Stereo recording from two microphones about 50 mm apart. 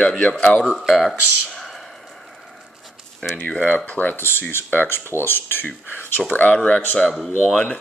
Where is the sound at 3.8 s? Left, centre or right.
Left.